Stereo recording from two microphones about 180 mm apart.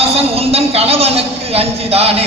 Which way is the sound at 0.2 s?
35° right (ahead or behind).